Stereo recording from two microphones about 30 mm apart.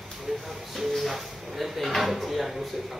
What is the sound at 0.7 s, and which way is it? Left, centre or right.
Speech, centre.